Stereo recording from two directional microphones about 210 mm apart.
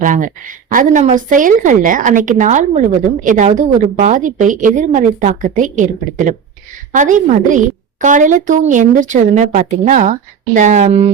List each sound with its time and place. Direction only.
0.0 s a woman's voice: 40° right (ahead or behind)